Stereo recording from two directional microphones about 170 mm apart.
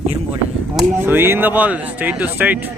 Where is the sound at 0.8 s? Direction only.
10° right (ahead or behind).